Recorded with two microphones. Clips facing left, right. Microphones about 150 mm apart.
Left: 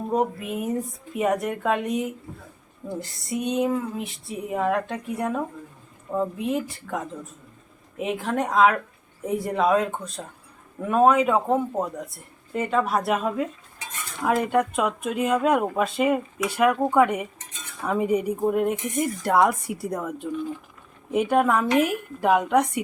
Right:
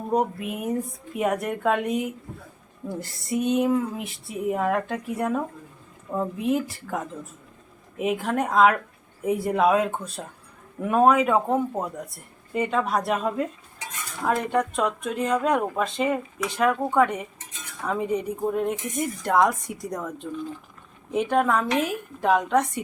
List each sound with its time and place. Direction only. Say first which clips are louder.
0.1 s speech: right 1 dB; centre (ahead or behind)